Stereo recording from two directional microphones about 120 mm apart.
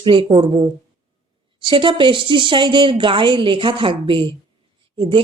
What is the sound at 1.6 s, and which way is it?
Speech, 40° right (ahead or behind).